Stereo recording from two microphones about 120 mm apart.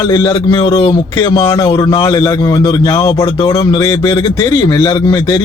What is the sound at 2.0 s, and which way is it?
A man's voice, 30° left (ahead or behind).